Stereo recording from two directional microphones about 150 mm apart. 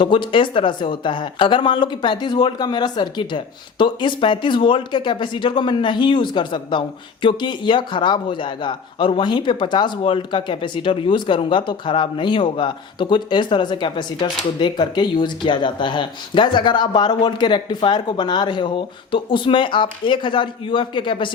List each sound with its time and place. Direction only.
0.0 s speech: 35° left (ahead or behind)